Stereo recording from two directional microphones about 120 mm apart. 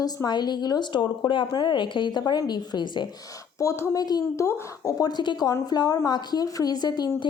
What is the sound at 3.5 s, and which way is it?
A woman's voice, 25° left (ahead or behind).